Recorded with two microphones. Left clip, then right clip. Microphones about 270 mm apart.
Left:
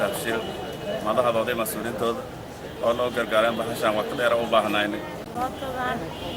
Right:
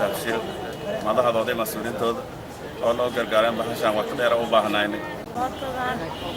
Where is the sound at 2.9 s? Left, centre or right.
Centre.